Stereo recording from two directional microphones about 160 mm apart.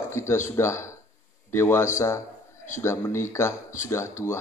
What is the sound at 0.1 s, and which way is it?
Speech, 15° left (ahead or behind).